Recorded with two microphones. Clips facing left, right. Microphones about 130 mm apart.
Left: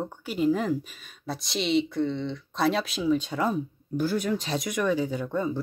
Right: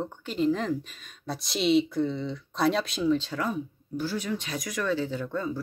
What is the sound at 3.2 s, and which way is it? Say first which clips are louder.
Speech: left 3 dB; 20° left (ahead or behind).